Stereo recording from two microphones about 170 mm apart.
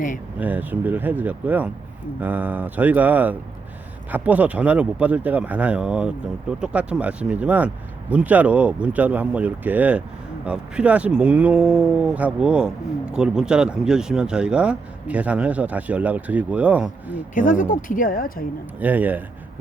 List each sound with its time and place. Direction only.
0.3 s speech: 10° right (ahead or behind)
17.3 s speech: 50° left (ahead or behind)
18.8 s speech: 10° right (ahead or behind)